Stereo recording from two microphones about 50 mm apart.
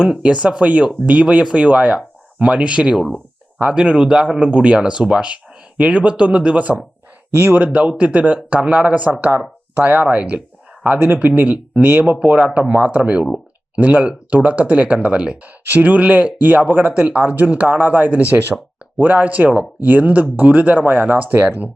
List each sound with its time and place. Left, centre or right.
0.0 s speech: right
7.3 s speech: right
11.4 s speech: right
11.8 s speech: right
12.2 s speech: right
15.6 s speech: right